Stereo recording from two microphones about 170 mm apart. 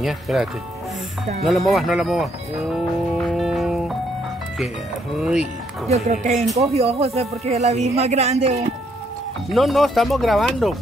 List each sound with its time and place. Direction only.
0.0 s speech: centre (ahead or behind)
1.7 s music: centre (ahead or behind)
5.2 s speech: 5° right (ahead or behind)
5.9 s speech: 40° right (ahead or behind)
9.5 s speech: centre (ahead or behind)